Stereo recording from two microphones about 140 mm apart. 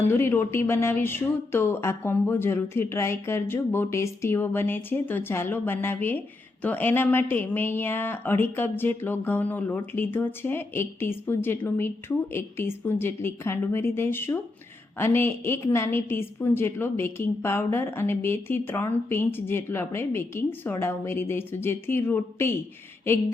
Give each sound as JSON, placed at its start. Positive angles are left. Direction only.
{"t": 0.1, "sound": "speech", "side_deg": 15}